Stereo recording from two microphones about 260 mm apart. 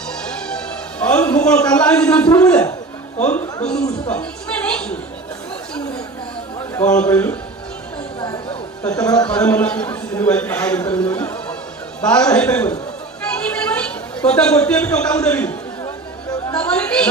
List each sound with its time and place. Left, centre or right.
0.1 s music: centre
1.8 s a man's voice: centre
6.9 s speech: centre
8.2 s chatter: centre
8.8 s a man's voice: centre
13.5 s a sound: centre
14.6 s a man's voice: centre
16.4 s chatter: centre